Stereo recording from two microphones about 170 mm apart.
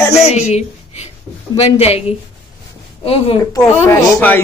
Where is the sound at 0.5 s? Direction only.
40° left (ahead or behind).